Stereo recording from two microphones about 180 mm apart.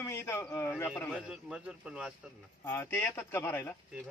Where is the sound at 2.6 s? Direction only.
15° left (ahead or behind).